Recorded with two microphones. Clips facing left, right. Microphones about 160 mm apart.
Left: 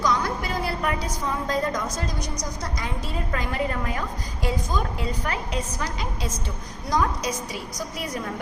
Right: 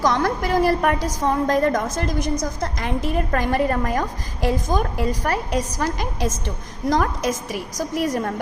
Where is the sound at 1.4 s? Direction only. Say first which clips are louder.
Right 5 dB; 50° right (ahead or behind).